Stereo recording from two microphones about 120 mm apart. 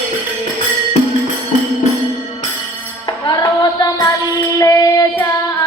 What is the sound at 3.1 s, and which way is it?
Music, 35° left (ahead or behind).